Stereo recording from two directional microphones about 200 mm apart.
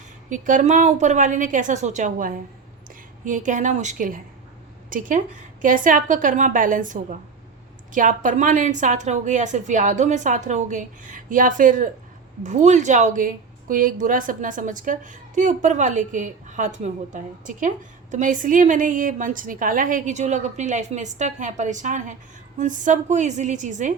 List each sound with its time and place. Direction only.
0.3 s a woman's voice: 40° right (ahead or behind)